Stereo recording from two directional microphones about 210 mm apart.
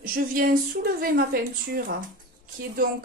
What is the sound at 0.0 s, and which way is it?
Speech, 45° right (ahead or behind).